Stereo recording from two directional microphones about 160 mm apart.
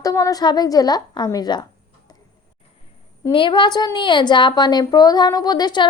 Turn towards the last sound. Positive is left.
turn(degrees=25)  # may be behind; listen again after turning